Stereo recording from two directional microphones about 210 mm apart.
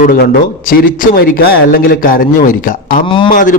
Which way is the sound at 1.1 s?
45° left (ahead or behind).